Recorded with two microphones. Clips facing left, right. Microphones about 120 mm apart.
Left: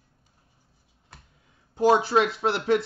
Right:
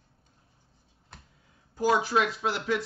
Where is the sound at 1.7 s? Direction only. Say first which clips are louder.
Left 5 dB; 25° left (ahead or behind).